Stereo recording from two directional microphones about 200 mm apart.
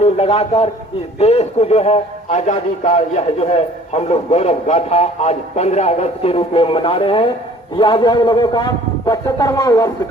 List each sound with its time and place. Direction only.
0.0 s a man's voice: 30° left (ahead or behind)